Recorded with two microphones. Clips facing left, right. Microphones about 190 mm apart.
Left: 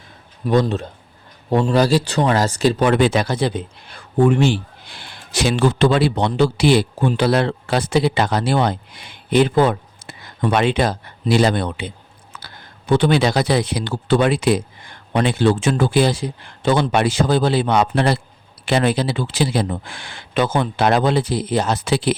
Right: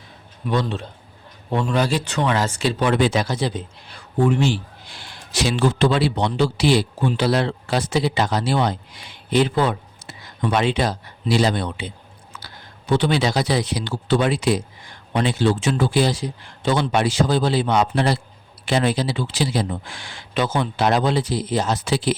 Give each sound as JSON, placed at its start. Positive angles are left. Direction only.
{"t": 0.4, "sound": "speech", "side_deg": 40}